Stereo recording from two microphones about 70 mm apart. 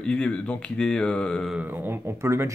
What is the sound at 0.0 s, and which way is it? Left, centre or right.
Speech, centre.